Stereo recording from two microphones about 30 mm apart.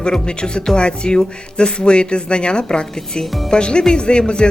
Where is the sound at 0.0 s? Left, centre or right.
Left.